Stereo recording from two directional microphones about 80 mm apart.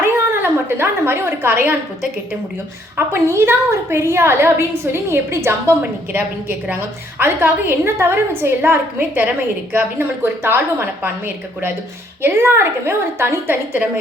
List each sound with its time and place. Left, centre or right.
0.0 s a sound: right
2.9 s a woman's voice: right
12.2 s a woman's voice: right